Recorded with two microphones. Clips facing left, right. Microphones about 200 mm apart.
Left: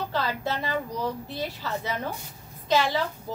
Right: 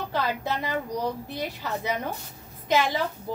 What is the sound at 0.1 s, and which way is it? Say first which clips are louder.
A woman's voice: right 1 dB; 15° right (ahead or behind).